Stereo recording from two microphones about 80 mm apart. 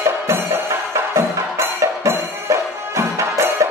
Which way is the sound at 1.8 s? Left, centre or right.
Right.